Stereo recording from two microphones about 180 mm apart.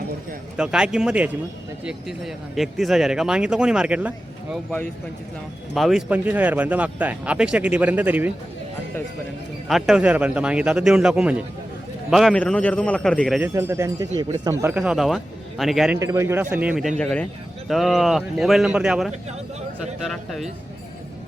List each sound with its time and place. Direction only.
0.5 s speech: 5° right (ahead or behind)
4.5 s speech: 5° left (ahead or behind)
9.6 s a man's voice: centre (ahead or behind)
13.4 s speech: 15° right (ahead or behind)
14.8 s speech: centre (ahead or behind)
16.0 s speech: 15° right (ahead or behind)
17.0 s a man's voice: 5° left (ahead or behind)